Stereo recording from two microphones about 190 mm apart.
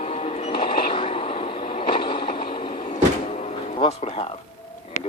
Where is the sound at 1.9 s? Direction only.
25° left (ahead or behind).